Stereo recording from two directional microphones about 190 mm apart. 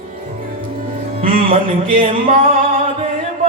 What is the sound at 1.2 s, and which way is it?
Music, 50° right (ahead or behind).